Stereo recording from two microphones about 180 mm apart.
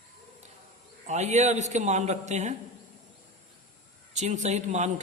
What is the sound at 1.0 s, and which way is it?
A man's voice, 40° right (ahead or behind).